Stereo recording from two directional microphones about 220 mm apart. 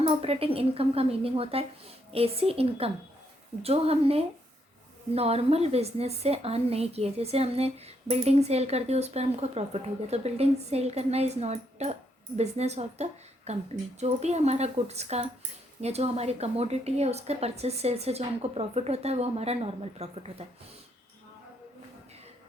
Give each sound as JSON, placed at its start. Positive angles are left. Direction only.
{"t": 0.0, "sound": "a woman's voice", "side_deg": -25}